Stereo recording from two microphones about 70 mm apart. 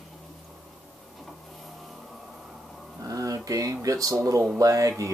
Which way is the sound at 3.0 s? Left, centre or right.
Right.